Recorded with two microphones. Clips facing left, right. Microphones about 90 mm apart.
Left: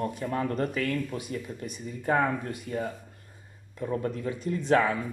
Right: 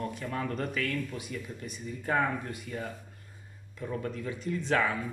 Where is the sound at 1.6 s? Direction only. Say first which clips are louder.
Left 5 dB; 20° left (ahead or behind).